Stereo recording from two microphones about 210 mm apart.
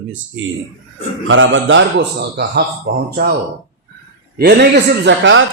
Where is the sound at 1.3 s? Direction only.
65° right (ahead or behind).